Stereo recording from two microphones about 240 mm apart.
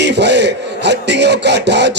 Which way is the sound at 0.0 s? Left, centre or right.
Right.